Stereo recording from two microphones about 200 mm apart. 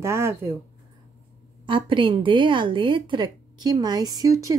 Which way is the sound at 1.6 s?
25° right (ahead or behind).